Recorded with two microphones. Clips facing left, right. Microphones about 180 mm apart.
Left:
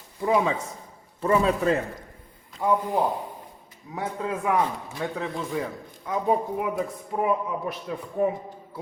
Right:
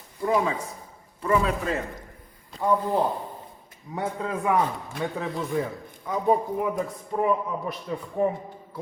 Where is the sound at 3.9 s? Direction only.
Centre (ahead or behind).